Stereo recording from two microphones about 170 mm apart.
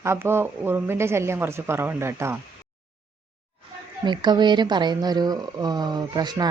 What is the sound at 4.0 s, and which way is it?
A woman's voice, 25° right (ahead or behind).